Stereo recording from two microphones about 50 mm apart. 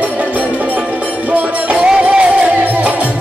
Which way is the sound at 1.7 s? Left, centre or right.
Right.